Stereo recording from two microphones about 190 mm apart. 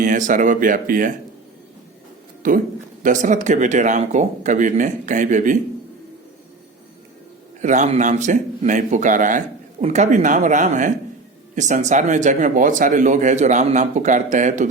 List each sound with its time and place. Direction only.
0.0 s speech: 45° right (ahead or behind)
2.4 s speech: 45° right (ahead or behind)
7.6 s speech: 40° right (ahead or behind)